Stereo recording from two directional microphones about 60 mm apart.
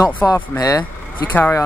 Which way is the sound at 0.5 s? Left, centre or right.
Left.